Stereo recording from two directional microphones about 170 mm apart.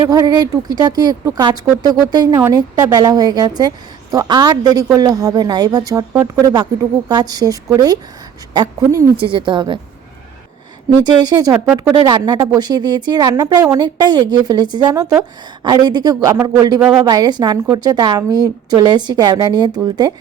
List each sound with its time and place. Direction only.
0.0 s a woman's voice: 20° right (ahead or behind)
11.0 s a woman's voice: 25° right (ahead or behind)